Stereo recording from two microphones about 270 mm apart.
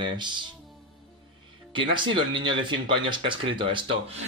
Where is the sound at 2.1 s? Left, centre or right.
Centre.